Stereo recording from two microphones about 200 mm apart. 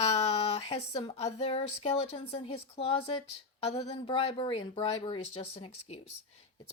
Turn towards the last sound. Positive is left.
turn(degrees=30)  # may be behind; listen again after turning